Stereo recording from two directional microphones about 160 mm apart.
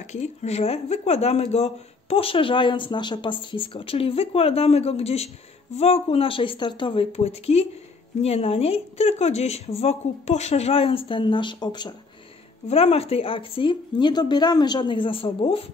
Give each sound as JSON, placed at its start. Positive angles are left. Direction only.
{"t": 0.0, "sound": "speech", "side_deg": 45}
{"t": 12.6, "sound": "speech", "side_deg": 40}